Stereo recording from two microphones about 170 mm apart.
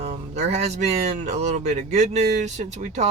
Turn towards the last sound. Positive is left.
turn(degrees=-40)  # may be behind; listen again after turning